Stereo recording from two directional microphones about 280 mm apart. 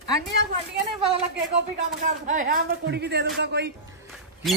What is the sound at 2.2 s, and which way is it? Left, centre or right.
Speech, right.